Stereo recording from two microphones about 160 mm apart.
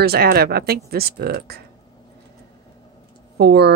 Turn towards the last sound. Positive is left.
turn(degrees=-90)